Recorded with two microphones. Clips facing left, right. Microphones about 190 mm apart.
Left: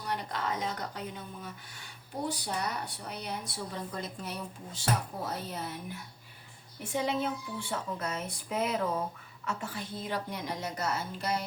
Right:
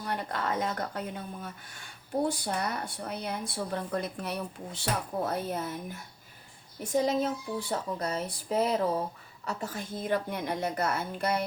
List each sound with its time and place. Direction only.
0.0 s speech: 55° right (ahead or behind)
6.7 s a woman's voice: 40° right (ahead or behind); by 11.4 s 55° right (ahead or behind)